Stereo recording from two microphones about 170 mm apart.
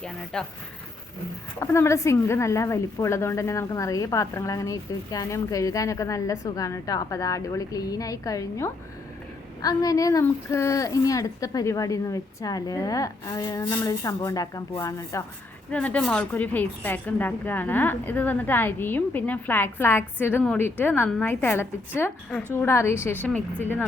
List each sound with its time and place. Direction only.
0.3 s speech: 5° left (ahead or behind)
1.5 s a woman's voice: 15° left (ahead or behind)
15.7 s a woman's voice: 10° left (ahead or behind)